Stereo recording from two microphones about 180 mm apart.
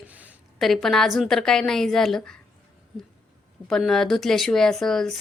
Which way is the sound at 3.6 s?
Centre (ahead or behind).